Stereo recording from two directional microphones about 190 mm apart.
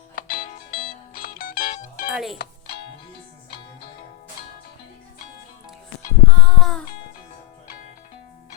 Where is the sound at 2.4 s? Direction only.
55° left (ahead or behind).